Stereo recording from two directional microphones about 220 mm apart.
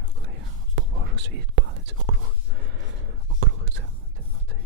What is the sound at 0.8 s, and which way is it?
Whispering, 55° right (ahead or behind).